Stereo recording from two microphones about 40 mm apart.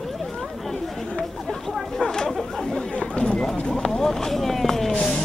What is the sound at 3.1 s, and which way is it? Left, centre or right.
Run, left.